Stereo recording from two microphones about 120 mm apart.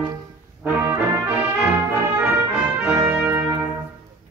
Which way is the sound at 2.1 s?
15° right (ahead or behind).